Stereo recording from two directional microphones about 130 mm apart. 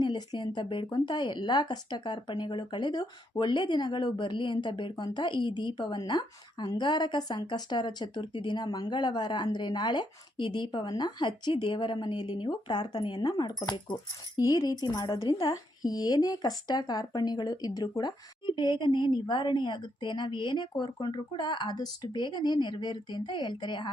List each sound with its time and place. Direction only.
0.0 s speech: 35° left (ahead or behind)